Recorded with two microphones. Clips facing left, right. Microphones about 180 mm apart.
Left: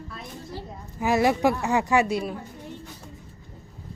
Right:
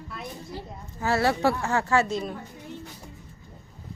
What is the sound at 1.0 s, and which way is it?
A woman's voice, 15° left (ahead or behind).